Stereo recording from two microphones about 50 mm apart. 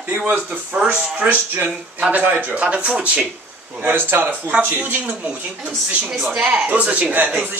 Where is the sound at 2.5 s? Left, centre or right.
Right.